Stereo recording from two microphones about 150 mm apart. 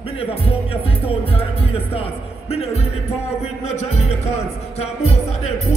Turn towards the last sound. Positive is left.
turn(degrees=45)  # may be behind; listen again after turning